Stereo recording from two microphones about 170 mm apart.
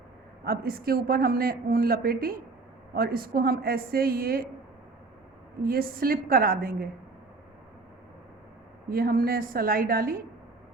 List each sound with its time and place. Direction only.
0.4 s a woman's voice: 60° right (ahead or behind)
5.6 s a woman's voice: 60° right (ahead or behind)
8.9 s a woman's voice: 60° right (ahead or behind)